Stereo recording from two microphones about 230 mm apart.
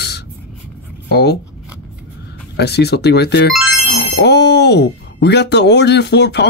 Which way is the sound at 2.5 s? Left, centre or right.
Left.